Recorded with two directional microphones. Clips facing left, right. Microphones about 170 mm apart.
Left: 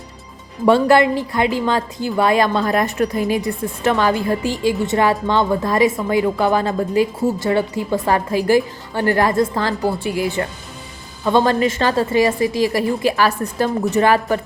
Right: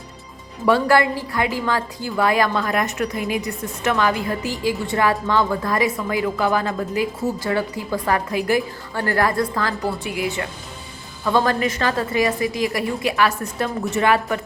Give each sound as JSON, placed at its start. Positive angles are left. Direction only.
{"t": 0.6, "sound": "a woman's voice", "side_deg": 25}